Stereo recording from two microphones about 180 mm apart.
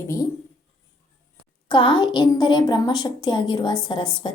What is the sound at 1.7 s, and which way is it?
A woman's voice, 25° left (ahead or behind).